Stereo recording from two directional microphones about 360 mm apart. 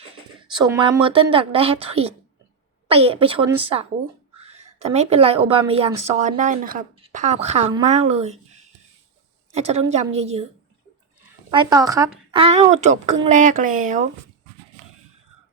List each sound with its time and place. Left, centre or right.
0.3 s a woman's voice: centre
4.4 s a sound: right
4.8 s a woman's voice: centre
11.5 s a woman's voice: centre